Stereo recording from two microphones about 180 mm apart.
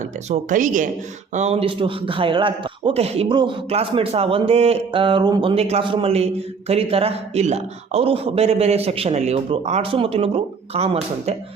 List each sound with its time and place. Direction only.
0.3 s a man's voice: 45° right (ahead or behind)